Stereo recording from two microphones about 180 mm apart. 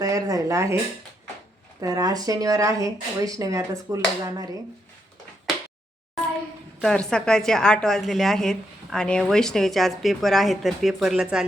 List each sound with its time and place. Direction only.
0.0 s speech: 20° right (ahead or behind)
1.8 s speech: 20° right (ahead or behind)
6.8 s a woman's voice: 5° left (ahead or behind)